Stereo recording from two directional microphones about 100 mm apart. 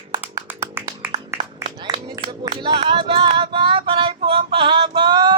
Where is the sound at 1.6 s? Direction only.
50° right (ahead or behind).